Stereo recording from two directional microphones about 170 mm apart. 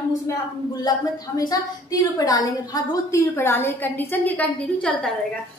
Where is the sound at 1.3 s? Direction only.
20° left (ahead or behind); by 5.0 s 5° left (ahead or behind).